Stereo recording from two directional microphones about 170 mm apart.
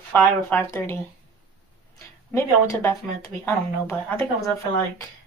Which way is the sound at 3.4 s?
15° left (ahead or behind).